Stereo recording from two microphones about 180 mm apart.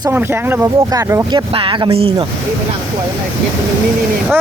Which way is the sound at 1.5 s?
30° right (ahead or behind).